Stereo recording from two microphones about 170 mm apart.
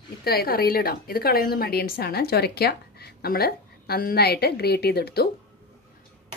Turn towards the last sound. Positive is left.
turn(degrees=70)  # may be behind; listen again after turning